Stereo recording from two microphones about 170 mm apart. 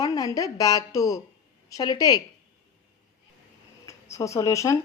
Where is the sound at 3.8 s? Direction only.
20° left (ahead or behind).